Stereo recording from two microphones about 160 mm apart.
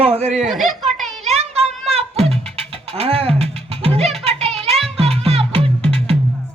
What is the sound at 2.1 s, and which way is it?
Music, 40° right (ahead or behind).